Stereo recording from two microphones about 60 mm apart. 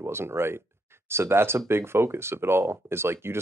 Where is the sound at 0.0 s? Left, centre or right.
Right.